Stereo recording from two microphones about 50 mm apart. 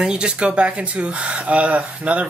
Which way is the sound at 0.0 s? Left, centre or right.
Centre.